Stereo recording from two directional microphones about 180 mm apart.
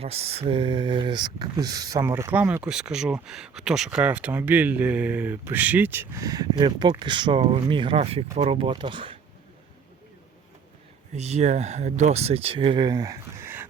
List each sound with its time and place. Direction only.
0.0 s speech: 35° right (ahead or behind)
11.1 s speech: 40° right (ahead or behind); by 13.7 s 15° right (ahead or behind)